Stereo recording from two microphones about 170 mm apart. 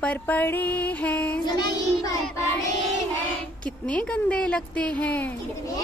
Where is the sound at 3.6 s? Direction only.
5° left (ahead or behind).